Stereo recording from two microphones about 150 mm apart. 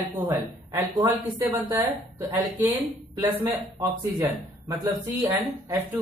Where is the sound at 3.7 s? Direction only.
25° right (ahead or behind).